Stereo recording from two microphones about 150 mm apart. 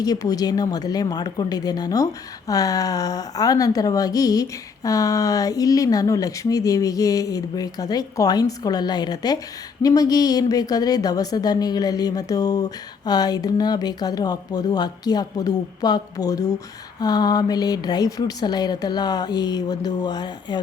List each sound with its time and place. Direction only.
0.0 s a woman's voice: 25° left (ahead or behind)